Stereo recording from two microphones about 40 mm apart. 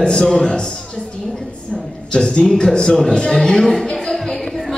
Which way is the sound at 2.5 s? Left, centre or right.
Centre.